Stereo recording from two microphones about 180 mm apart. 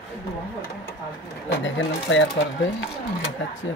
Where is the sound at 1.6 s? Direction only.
90° left.